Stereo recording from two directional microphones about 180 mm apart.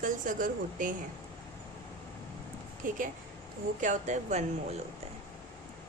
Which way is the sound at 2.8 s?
45° right (ahead or behind).